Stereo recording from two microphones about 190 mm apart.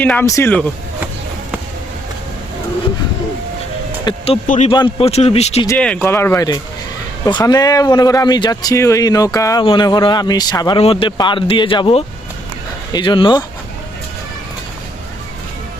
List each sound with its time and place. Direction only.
0.0 s speech: 10° left (ahead or behind)
4.1 s speech: 25° left (ahead or behind)
4.4 s a man's voice: 40° left (ahead or behind)
4.7 s a man's voice: 25° left (ahead or behind)
5.6 s speech: 5° left (ahead or behind); by 13.4 s 25° left (ahead or behind)